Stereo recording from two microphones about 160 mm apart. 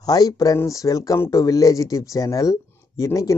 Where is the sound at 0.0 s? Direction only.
25° left (ahead or behind).